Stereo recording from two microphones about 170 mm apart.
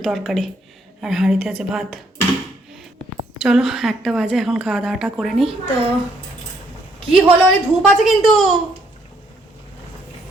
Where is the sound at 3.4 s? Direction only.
Centre (ahead or behind).